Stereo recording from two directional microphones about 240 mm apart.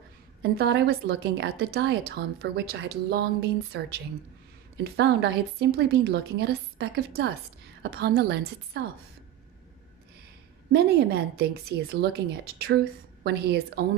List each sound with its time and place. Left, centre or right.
0.4 s a woman's voice: right
10.7 s a woman's voice: right